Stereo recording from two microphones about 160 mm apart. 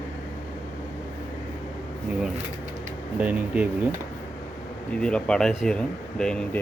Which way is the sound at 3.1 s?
10° right (ahead or behind).